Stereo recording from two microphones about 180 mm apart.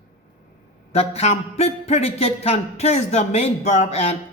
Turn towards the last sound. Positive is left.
turn(degrees=35)  # may be behind; listen again after turning